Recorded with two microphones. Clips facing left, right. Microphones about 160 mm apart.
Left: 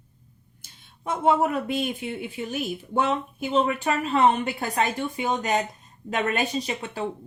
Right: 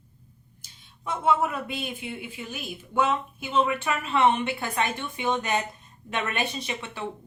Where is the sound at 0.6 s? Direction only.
50° left (ahead or behind).